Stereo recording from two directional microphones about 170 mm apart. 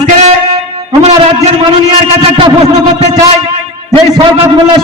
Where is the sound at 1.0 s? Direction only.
40° right (ahead or behind).